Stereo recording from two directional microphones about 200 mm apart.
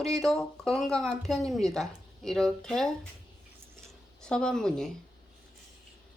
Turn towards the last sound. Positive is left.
turn(degrees=5)  # may be behind; listen again after turning